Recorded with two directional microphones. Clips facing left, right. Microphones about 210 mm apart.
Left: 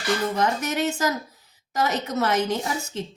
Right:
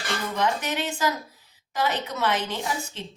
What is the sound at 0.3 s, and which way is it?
A woman's voice, 45° left (ahead or behind).